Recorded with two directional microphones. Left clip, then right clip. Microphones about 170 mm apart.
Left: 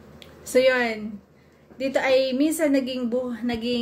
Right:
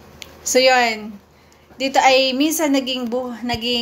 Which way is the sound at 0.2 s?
10° left (ahead or behind).